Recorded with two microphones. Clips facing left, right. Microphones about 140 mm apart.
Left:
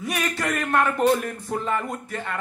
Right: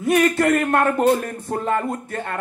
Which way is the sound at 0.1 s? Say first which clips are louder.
Right 11 dB; 50° right (ahead or behind).